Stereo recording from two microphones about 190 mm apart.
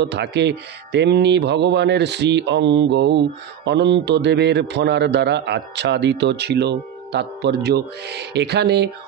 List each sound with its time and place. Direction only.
0.0 s speech: 65° right (ahead or behind)